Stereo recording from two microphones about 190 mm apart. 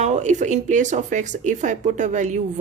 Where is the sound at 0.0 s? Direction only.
40° right (ahead or behind).